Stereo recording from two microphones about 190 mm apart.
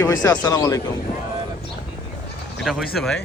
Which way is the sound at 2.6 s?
Centre (ahead or behind).